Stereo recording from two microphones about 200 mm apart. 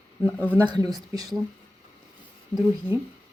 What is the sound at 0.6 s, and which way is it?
Speech, 20° right (ahead or behind).